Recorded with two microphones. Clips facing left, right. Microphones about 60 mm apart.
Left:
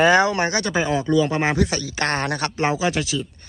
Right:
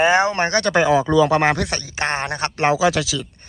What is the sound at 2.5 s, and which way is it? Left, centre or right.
Speech, right.